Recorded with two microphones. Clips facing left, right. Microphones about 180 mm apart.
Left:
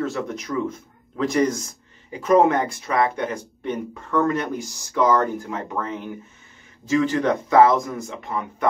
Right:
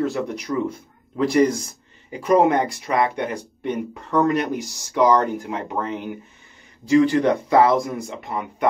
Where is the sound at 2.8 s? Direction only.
20° right (ahead or behind).